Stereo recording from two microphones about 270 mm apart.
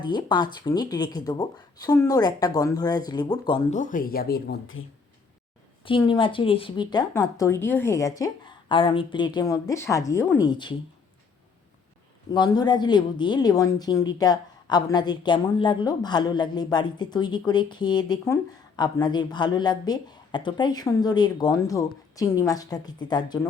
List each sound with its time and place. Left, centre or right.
0.0 s speech: centre; by 4.8 s left
5.8 s speech: centre
12.3 s speech: centre